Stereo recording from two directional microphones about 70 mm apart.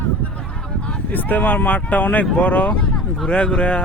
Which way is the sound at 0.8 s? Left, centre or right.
Left.